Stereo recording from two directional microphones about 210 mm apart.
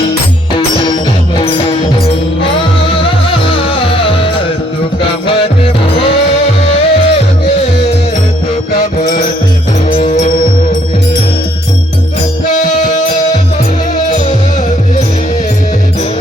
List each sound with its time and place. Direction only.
0.5 s music: 25° left (ahead or behind)
3.1 s music: 25° left (ahead or behind)
8.7 s music: 40° left (ahead or behind)